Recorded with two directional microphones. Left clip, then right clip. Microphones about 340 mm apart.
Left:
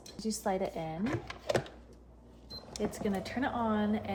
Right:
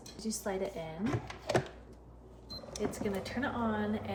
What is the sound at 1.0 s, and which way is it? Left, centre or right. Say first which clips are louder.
Speech: even; centre.